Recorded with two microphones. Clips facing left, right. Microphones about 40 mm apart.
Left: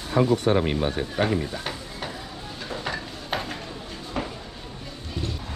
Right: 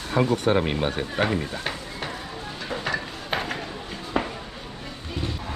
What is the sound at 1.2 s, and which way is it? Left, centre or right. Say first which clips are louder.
Stir: even; right.